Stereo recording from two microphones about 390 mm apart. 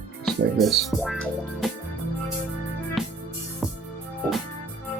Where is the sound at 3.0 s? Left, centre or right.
Centre.